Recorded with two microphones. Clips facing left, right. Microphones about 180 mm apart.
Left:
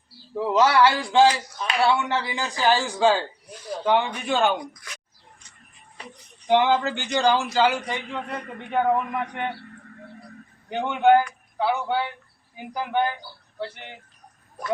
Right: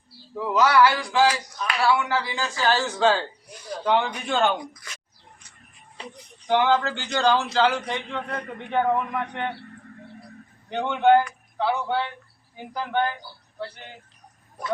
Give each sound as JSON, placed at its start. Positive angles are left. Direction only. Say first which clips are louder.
{"t": 0.3, "sound": "a man's voice", "louder": "even", "side_deg": 25}
{"t": 6.5, "sound": "a man's voice", "louder": "left 1 dB", "side_deg": 20}
{"t": 10.7, "sound": "a man's voice", "louder": "even", "side_deg": 5}